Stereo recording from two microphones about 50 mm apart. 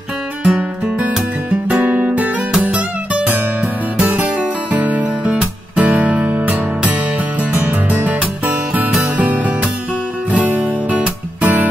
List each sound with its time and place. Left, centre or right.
0.4 s music: right